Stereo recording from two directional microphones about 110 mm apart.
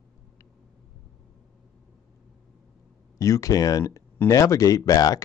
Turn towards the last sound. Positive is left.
turn(degrees=35)  # may be behind; listen again after turning